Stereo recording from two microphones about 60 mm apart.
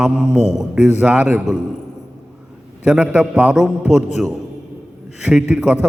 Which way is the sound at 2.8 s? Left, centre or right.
Centre.